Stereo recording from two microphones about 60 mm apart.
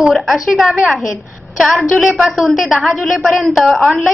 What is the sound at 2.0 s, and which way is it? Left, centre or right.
Speech, centre.